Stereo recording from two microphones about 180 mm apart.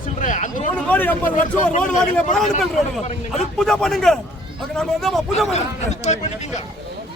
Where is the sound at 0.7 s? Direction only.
10° left (ahead or behind).